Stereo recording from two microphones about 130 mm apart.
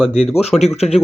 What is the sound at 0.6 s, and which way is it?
Speech, 55° left (ahead or behind).